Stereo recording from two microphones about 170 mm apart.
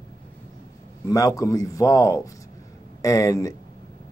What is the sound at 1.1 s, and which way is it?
Speech, 20° left (ahead or behind).